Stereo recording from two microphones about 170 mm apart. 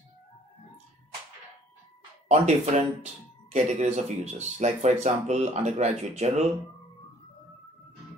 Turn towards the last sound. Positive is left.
turn(degrees=-40)  # may be behind; listen again after turning